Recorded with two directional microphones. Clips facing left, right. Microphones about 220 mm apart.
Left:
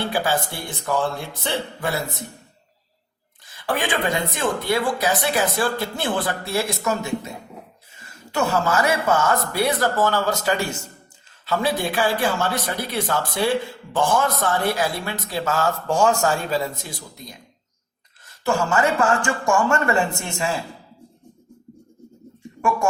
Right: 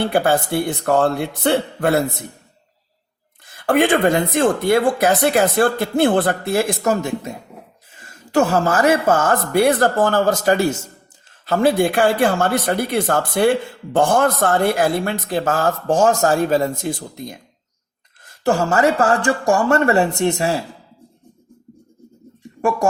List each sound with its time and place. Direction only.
0.1 s speech: 60° right (ahead or behind)
3.4 s speech: 55° right (ahead or behind)
18.6 s speech: 40° right (ahead or behind)